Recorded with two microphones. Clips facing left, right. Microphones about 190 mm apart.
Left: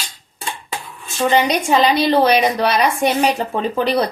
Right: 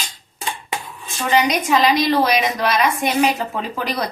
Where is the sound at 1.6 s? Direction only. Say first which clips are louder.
Left 2 dB; 30° left (ahead or behind).